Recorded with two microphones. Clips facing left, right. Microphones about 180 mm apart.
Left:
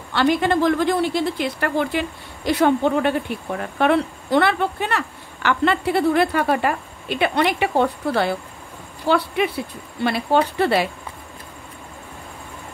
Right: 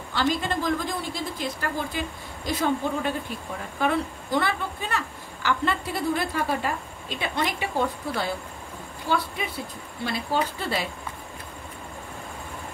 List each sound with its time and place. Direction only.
0.1 s a woman's voice: 70° left (ahead or behind)